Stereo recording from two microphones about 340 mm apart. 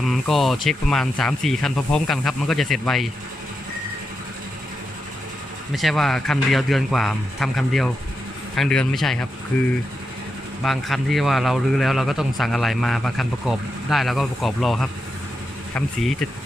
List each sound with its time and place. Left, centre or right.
0.0 s speech: centre
5.7 s speech: centre
10.6 s speech: centre